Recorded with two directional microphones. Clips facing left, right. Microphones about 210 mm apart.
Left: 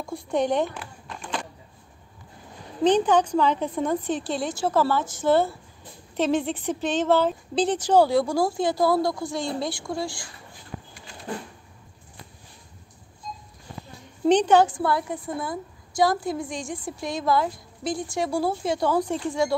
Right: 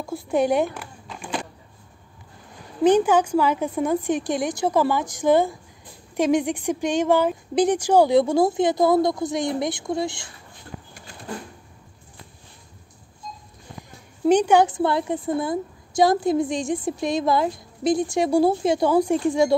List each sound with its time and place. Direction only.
0.0 s a sound: 5° right (ahead or behind)
2.8 s a woman's voice: 10° right (ahead or behind)
14.2 s a woman's voice: 10° right (ahead or behind)